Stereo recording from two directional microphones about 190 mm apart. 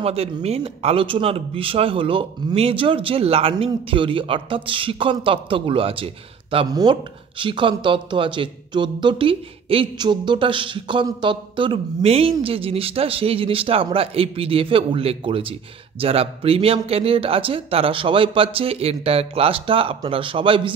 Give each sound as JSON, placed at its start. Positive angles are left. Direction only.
{"t": 0.0, "sound": "speech", "side_deg": -30}